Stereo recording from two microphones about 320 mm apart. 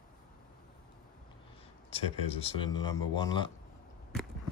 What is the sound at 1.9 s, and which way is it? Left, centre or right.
Speech, centre.